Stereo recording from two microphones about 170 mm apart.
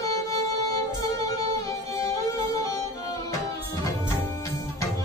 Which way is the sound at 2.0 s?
20° left (ahead or behind).